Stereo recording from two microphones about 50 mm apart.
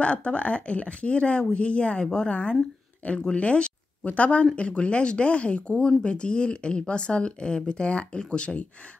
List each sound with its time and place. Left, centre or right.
0.0 s speech: left